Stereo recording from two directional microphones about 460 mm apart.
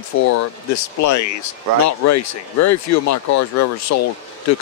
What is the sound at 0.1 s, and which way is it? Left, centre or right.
Speech, left.